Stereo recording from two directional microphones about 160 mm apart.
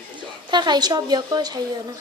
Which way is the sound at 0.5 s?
25° right (ahead or behind).